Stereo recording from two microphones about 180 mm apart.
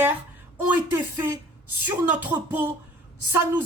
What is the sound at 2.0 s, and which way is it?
Speech, 10° right (ahead or behind).